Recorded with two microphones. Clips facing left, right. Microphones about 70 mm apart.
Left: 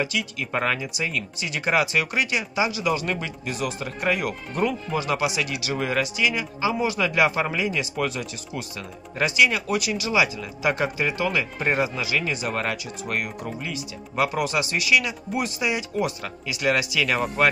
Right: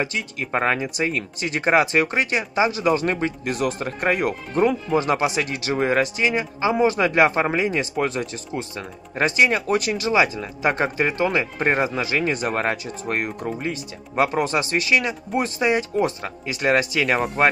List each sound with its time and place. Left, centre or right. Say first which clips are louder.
0.0 s speech: right 1 dB; right